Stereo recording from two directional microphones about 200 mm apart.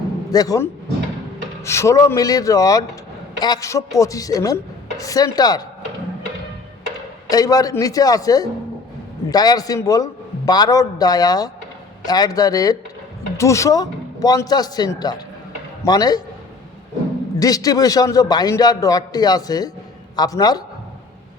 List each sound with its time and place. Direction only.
0.3 s a man's voice: 15° left (ahead or behind)
7.3 s a man's voice: 20° left (ahead or behind)
17.4 s a man's voice: 15° left (ahead or behind)